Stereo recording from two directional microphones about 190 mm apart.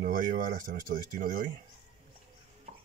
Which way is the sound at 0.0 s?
45° right (ahead or behind).